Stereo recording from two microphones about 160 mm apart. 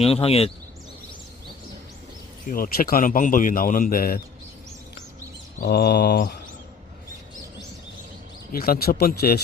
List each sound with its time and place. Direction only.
0.0 s speech: 35° left (ahead or behind)
2.5 s a man's voice: 65° left (ahead or behind)
5.5 s bird: 75° left (ahead or behind)
8.5 s speech: 70° left (ahead or behind)